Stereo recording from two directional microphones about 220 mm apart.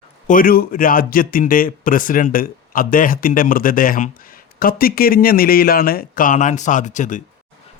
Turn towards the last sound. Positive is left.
turn(degrees=35)  # may be behind; listen again after turning